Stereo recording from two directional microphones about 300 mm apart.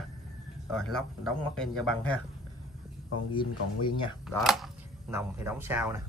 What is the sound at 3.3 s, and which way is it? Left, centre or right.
Speech, centre.